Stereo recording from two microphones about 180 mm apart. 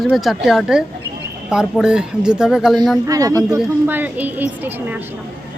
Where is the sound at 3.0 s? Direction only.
20° right (ahead or behind).